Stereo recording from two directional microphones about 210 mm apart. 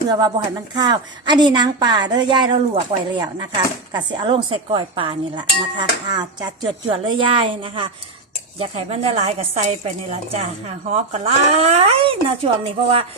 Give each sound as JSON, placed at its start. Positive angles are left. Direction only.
{"t": 0.1, "sound": "speech", "side_deg": -20}
{"t": 3.9, "sound": "speech", "side_deg": -20}